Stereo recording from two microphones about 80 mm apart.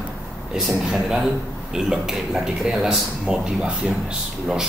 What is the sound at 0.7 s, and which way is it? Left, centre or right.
A man's voice, centre.